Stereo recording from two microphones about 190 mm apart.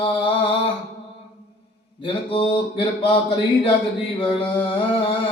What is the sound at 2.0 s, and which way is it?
Speech, 30° left (ahead or behind).